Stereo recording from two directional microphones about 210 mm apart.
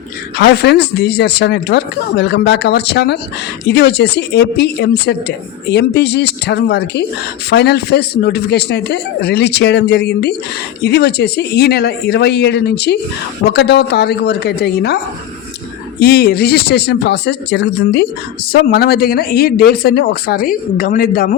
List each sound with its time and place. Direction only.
0.3 s speech: 50° left (ahead or behind)
16.0 s speech: 50° left (ahead or behind)